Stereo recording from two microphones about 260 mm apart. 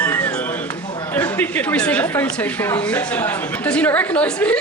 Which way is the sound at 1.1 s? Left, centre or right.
Centre.